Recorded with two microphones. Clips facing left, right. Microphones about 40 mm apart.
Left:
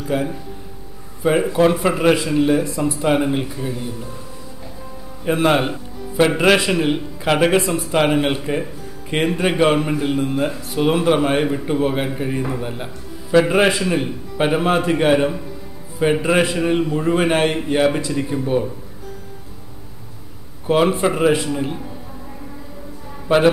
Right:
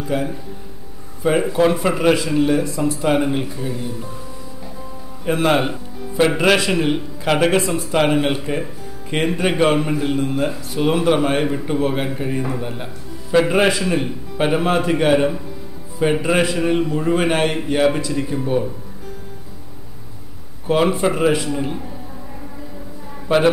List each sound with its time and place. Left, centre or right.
0.1 s a man's voice: centre
5.2 s a man's voice: centre
20.6 s a man's voice: centre
23.2 s a man's voice: centre